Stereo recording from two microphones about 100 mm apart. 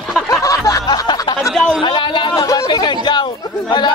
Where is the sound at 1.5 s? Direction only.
5° left (ahead or behind).